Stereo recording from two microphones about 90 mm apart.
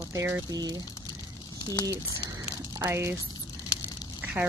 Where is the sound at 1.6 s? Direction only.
50° left (ahead or behind).